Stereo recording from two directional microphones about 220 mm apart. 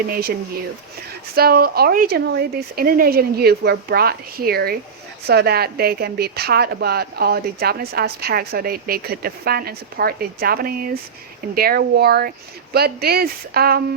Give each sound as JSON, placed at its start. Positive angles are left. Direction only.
{"t": 0.1, "sound": "speech", "side_deg": -45}
{"t": 1.4, "sound": "speech", "side_deg": -45}